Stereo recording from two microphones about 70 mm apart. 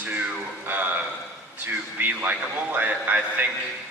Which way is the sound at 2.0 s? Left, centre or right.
Right.